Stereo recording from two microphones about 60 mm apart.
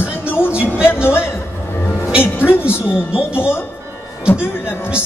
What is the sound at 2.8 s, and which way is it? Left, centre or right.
Speech, left.